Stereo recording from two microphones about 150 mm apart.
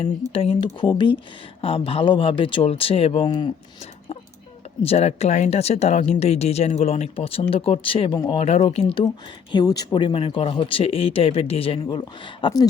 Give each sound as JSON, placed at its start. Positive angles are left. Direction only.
{"t": 0.3, "sound": "speech", "side_deg": 35}
{"t": 4.8, "sound": "speech", "side_deg": 45}
{"t": 8.1, "sound": "speech", "side_deg": 30}
{"t": 8.4, "sound": "speech", "side_deg": 45}
{"t": 9.0, "sound": "speech", "side_deg": 25}